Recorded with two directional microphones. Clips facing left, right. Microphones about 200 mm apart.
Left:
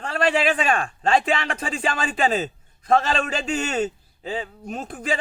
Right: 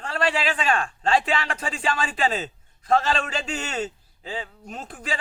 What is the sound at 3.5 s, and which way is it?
A man's voice, 50° left (ahead or behind).